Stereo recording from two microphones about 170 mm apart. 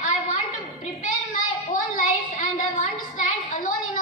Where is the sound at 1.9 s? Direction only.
50° left (ahead or behind).